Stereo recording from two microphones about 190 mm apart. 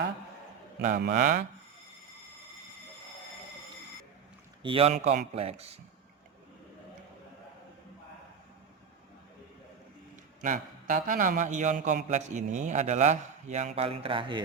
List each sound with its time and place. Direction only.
0.8 s speech: 40° right (ahead or behind)
4.6 s a man's voice: 30° right (ahead or behind)
10.4 s a man's voice: 45° right (ahead or behind); by 14.4 s 25° right (ahead or behind)